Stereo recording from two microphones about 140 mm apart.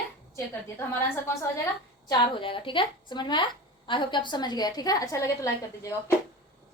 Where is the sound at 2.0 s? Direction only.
35° left (ahead or behind).